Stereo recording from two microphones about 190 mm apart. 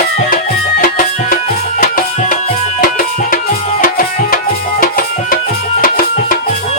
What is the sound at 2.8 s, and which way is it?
Music, 45° left (ahead or behind).